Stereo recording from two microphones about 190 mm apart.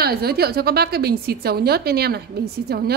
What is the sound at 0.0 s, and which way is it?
A woman's voice, 55° right (ahead or behind).